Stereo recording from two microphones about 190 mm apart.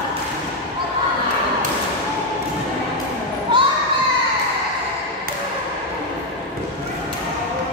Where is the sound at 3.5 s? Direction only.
25° right (ahead or behind).